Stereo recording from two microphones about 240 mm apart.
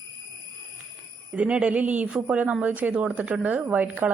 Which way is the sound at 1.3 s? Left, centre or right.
Centre.